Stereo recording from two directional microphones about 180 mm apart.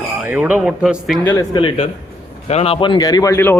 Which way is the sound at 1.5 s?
30° left (ahead or behind).